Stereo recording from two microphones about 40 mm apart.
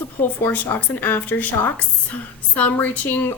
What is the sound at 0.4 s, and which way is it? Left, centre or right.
A woman's voice, left.